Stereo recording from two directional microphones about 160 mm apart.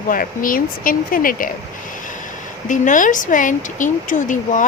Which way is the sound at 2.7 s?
55° left (ahead or behind).